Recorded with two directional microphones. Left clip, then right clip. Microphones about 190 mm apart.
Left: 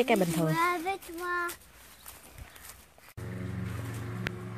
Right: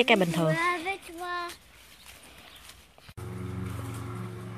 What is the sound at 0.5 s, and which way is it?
Child singing, 65° left (ahead or behind).